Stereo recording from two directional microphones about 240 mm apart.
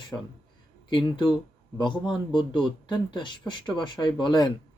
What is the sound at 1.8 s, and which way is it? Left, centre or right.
Speech, centre.